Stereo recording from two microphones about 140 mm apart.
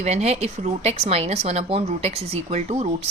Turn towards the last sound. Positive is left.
turn(degrees=-50)  # may be behind; listen again after turning